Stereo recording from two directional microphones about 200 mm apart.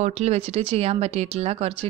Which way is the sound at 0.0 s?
35° right (ahead or behind).